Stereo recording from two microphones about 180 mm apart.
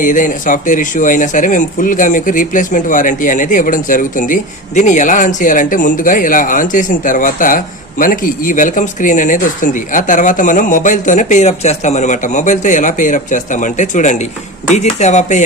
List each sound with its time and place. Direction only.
0.0 s speech: 45° left (ahead or behind)